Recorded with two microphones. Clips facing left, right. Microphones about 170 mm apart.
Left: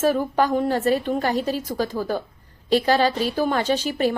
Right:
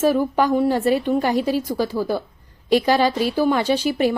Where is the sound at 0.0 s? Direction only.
10° right (ahead or behind).